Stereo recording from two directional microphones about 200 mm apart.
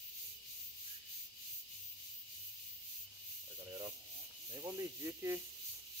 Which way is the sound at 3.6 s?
20° right (ahead or behind).